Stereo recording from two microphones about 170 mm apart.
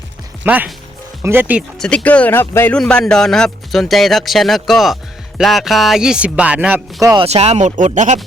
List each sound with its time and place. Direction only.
0.4 s speech: 10° right (ahead or behind)
1.8 s speech: 5° left (ahead or behind)
2.7 s speech: 5° left (ahead or behind); by 7.2 s 15° right (ahead or behind)
7.2 s speech: 35° right (ahead or behind)